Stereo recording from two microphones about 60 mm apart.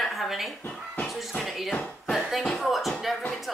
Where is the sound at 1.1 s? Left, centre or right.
Centre.